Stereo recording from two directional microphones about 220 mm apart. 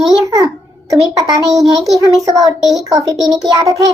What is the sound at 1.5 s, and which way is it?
Speech, centre (ahead or behind).